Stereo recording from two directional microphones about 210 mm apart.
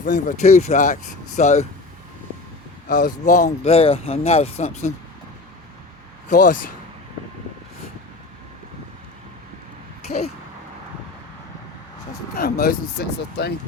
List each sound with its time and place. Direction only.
0.3 s speech: 30° left (ahead or behind)
2.9 s speech: 40° left (ahead or behind)
6.2 s speech: 35° left (ahead or behind)
10.1 s speech: 30° left (ahead or behind)
12.4 s speech: 45° left (ahead or behind)